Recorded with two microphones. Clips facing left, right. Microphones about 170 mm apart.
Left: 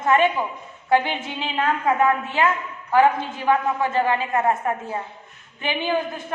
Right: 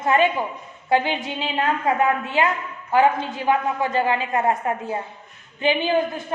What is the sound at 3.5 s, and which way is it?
A woman's voice, 15° right (ahead or behind).